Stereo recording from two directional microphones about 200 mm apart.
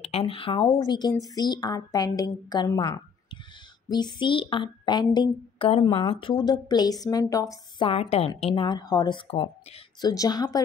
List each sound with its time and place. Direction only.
0.0 s speech: 30° left (ahead or behind)
3.9 s speech: 20° left (ahead or behind)
7.9 s speech: 30° left (ahead or behind)